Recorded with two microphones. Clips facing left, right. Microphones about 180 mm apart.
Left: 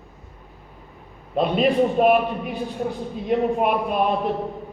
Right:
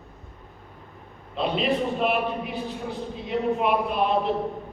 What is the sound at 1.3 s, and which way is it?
A man's voice, 50° left (ahead or behind).